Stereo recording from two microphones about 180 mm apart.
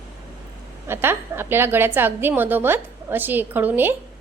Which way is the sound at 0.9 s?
15° right (ahead or behind).